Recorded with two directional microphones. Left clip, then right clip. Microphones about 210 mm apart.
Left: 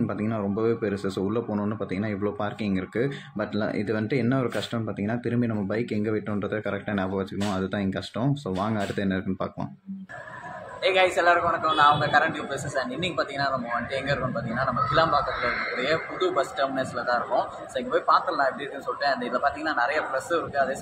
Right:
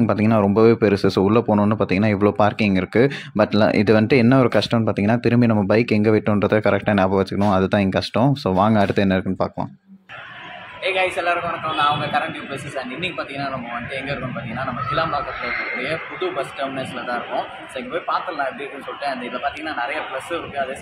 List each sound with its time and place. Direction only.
0.0 s speech: 40° right (ahead or behind)
10.8 s a man's voice: 5° left (ahead or behind)